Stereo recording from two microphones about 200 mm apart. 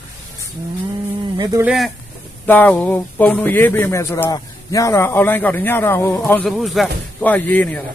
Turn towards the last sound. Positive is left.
turn(degrees=10)  # may be behind; listen again after turning